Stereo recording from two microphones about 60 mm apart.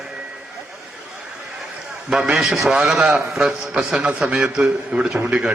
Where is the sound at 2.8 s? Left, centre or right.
Centre.